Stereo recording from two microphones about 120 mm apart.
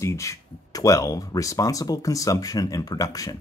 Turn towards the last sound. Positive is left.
turn(degrees=30)  # may be behind; listen again after turning